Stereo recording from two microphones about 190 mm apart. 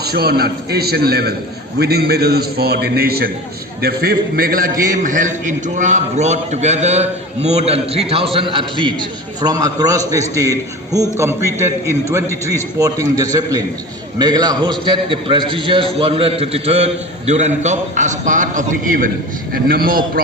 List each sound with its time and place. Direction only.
0.0 s a man's voice: 55° right (ahead or behind)